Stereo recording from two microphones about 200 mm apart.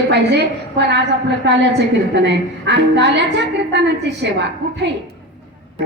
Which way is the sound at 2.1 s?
60° right (ahead or behind).